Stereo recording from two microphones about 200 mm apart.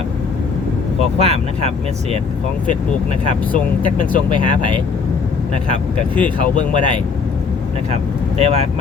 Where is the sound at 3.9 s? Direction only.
40° left (ahead or behind).